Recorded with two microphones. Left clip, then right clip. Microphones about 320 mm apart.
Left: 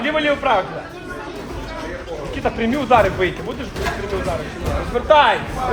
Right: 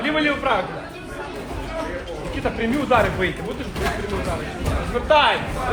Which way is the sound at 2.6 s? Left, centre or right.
Left.